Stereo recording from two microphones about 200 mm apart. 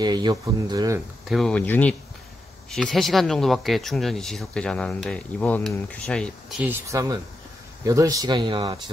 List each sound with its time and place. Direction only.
0.0 s speech: 20° right (ahead or behind)
1.3 s speech: 5° left (ahead or behind)
6.6 s speech: 15° right (ahead or behind)